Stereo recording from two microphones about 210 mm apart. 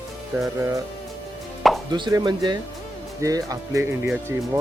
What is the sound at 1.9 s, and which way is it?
Speech, 20° right (ahead or behind).